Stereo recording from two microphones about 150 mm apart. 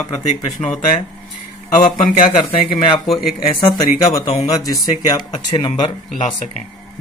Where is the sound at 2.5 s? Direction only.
40° left (ahead or behind).